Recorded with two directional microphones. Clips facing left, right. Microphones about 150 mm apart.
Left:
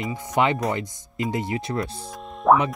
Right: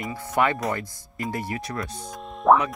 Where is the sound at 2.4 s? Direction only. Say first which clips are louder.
Even; centre (ahead or behind).